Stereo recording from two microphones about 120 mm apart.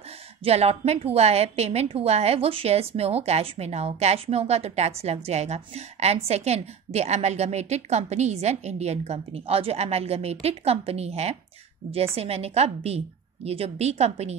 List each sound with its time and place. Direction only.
0.4 s a woman's voice: 60° right (ahead or behind)